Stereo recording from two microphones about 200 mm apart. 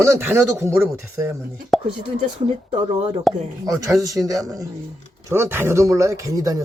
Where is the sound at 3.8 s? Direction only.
15° right (ahead or behind).